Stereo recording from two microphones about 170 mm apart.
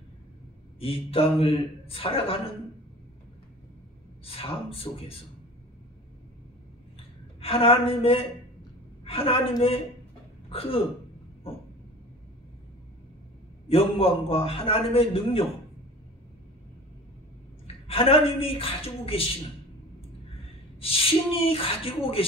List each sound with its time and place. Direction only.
0.7 s a man's voice: 35° left (ahead or behind)
4.2 s a man's voice: 35° left (ahead or behind)
7.0 s a sound: 35° left (ahead or behind)
9.0 s a man's voice: 35° left (ahead or behind)
11.4 s vehicle: 35° left (ahead or behind)
13.7 s a man's voice: 35° left (ahead or behind)
17.8 s a man's voice: 35° left (ahead or behind)
20.8 s a man's voice: 35° left (ahead or behind)